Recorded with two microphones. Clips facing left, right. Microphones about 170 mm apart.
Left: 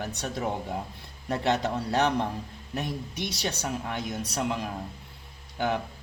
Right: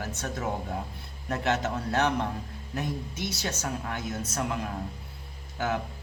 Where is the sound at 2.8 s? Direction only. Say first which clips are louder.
Even; 15° left (ahead or behind).